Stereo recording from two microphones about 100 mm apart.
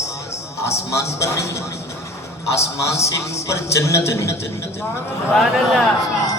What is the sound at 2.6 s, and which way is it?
A man's voice, 30° left (ahead or behind).